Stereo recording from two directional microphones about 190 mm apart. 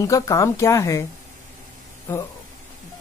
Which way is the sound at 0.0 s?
15° left (ahead or behind).